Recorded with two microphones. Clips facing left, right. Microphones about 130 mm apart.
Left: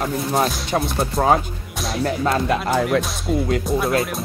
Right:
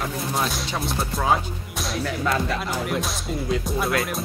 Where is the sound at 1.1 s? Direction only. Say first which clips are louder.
Left 5 dB; 40° left (ahead or behind).